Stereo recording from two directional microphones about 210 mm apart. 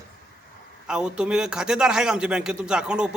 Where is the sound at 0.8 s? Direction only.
5° right (ahead or behind).